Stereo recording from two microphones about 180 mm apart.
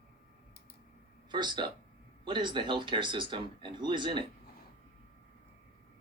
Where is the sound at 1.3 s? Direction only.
25° right (ahead or behind).